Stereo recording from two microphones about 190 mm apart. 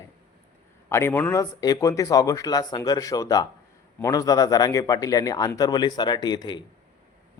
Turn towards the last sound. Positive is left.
turn(degrees=25)  # may be behind; listen again after turning